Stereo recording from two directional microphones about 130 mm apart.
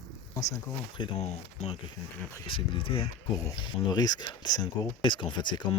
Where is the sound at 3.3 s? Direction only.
30° left (ahead or behind).